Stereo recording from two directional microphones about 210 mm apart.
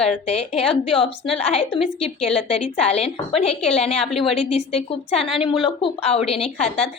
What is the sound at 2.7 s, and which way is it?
A woman's voice, 30° left (ahead or behind).